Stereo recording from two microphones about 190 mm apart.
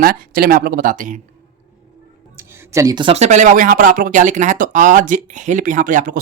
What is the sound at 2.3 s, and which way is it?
Speech, 15° right (ahead or behind).